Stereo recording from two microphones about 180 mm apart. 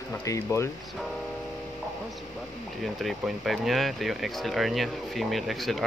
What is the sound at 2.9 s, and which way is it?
Speech, centre (ahead or behind).